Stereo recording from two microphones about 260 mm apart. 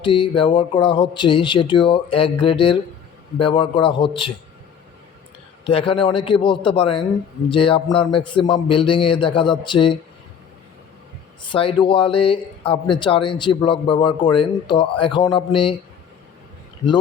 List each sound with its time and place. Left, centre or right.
0.0 s a man's voice: centre
5.6 s a man's voice: left
11.4 s a man's voice: centre